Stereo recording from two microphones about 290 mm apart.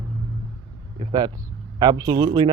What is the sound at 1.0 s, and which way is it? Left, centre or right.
Speech, centre.